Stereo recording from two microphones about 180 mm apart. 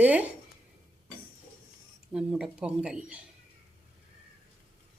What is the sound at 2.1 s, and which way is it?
Speech, 5° right (ahead or behind).